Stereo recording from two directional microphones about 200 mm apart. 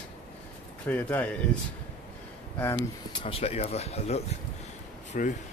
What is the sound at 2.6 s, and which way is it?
Speech, 20° left (ahead or behind).